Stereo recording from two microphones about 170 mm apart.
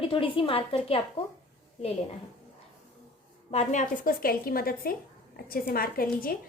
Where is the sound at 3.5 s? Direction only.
45° left (ahead or behind).